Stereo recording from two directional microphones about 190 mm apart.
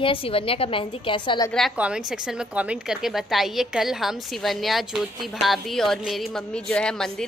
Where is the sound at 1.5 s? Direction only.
Centre (ahead or behind).